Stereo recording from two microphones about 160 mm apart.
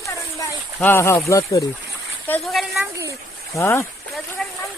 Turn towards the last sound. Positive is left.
turn(degrees=5)  # may be behind; listen again after turning